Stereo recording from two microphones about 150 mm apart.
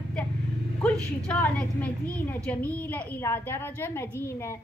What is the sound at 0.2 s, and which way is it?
Vehicle, 5° left (ahead or behind).